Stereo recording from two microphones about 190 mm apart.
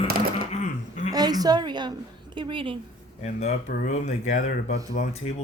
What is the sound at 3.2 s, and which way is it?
Speech, 35° left (ahead or behind).